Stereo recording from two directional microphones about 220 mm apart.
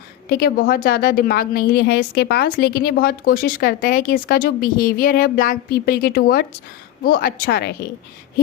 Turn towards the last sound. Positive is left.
turn(degrees=45)  # may be behind; listen again after turning